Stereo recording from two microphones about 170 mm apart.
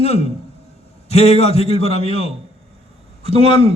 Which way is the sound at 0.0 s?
40° left (ahead or behind).